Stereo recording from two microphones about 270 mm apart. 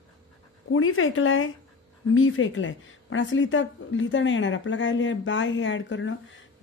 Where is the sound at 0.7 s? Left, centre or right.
Left.